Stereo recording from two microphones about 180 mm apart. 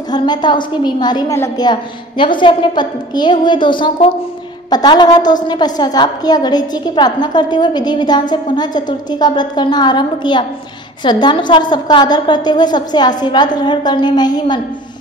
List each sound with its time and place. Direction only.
0.1 s a woman's voice: 25° left (ahead or behind)